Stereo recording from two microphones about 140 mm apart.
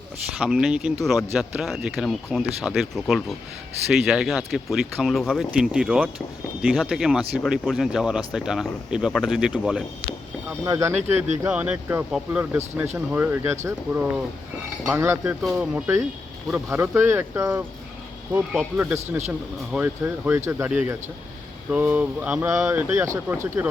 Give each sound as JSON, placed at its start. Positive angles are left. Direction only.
{"t": 0.3, "sound": "speech", "side_deg": -5}
{"t": 10.7, "sound": "speech", "side_deg": -20}
{"t": 11.4, "sound": "speech", "side_deg": -10}
{"t": 15.2, "sound": "speech", "side_deg": -10}
{"t": 22.4, "sound": "speech", "side_deg": -25}
{"t": 22.7, "sound": "speech", "side_deg": -10}